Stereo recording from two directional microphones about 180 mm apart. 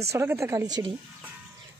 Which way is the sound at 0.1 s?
15° right (ahead or behind).